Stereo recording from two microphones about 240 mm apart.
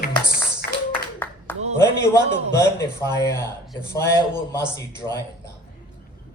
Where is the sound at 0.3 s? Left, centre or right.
Left.